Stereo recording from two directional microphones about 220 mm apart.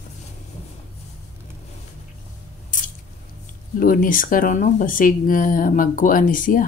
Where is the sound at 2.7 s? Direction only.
35° left (ahead or behind).